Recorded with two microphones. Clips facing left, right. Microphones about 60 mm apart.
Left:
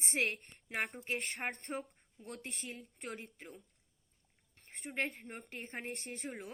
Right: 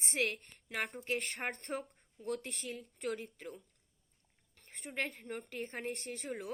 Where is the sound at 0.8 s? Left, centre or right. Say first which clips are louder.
Right 2 dB; centre.